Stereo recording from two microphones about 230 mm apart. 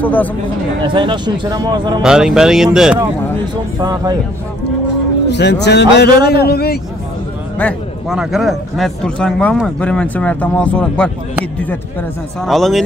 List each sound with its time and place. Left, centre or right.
0.0 s speech: centre
0.8 s speech: right
2.0 s a man's voice: centre
3.8 s speech: centre
5.3 s speech: left
7.5 s a man's voice: centre
12.4 s a man's voice: centre